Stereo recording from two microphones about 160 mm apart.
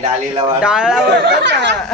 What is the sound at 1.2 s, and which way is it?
Speech, 90° right.